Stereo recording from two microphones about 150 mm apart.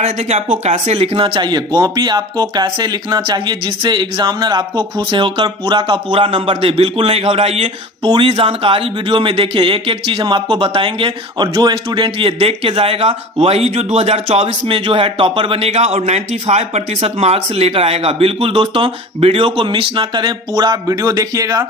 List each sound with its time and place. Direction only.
0.0 s speech: 45° right (ahead or behind); by 21.7 s 25° right (ahead or behind)